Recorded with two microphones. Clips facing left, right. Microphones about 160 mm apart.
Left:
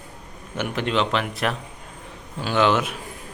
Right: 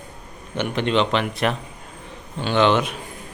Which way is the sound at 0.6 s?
5° left (ahead or behind).